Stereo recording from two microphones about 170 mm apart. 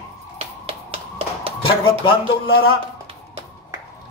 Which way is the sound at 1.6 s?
30° left (ahead or behind).